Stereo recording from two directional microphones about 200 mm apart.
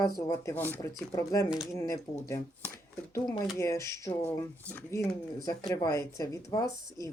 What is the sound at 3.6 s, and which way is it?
Speech, 15° left (ahead or behind).